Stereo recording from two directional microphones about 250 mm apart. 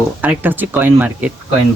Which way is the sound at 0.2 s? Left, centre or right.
Centre.